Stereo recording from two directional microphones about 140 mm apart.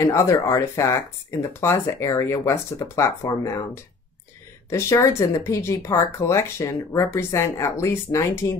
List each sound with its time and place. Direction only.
0.0 s speech: 20° left (ahead or behind)
4.6 s speech: 20° left (ahead or behind)